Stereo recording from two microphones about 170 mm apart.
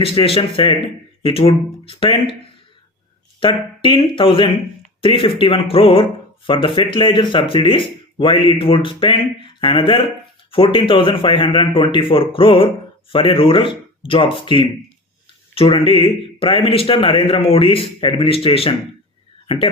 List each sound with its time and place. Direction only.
0.0 s speech: 35° left (ahead or behind)
3.4 s speech: 30° left (ahead or behind)
15.7 s speech: 30° left (ahead or behind)